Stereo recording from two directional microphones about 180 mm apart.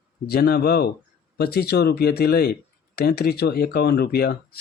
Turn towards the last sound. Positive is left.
turn(degrees=60)  # may be behind; listen again after turning